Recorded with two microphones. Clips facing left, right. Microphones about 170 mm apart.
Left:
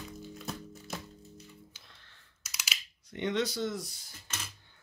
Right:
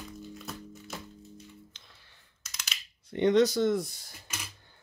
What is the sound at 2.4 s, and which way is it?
Computer keyboard, 5° left (ahead or behind).